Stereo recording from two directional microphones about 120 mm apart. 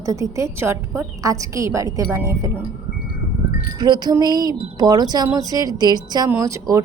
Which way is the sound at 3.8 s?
35° right (ahead or behind).